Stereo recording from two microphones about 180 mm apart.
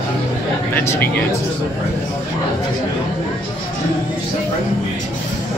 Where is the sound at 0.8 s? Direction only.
10° left (ahead or behind).